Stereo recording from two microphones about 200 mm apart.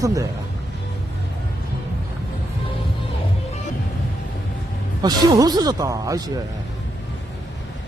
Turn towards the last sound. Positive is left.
turn(degrees=-20)  # may be behind; listen again after turning